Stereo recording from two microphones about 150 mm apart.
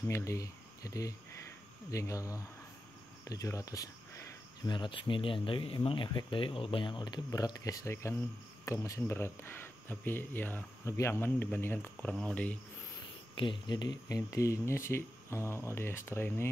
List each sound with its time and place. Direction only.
0.1 s speech: 20° left (ahead or behind)
4.6 s speech: 30° left (ahead or behind); by 12.5 s 10° left (ahead or behind)
13.4 s speech: 30° left (ahead or behind); by 16.4 s 15° left (ahead or behind)